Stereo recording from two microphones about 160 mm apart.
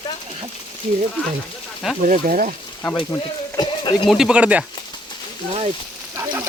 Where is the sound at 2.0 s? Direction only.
60° right (ahead or behind).